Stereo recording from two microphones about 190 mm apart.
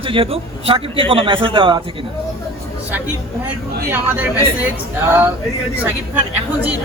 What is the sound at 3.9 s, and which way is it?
Speech, 10° right (ahead or behind).